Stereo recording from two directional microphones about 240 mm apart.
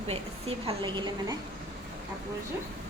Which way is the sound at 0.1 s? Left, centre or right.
Right.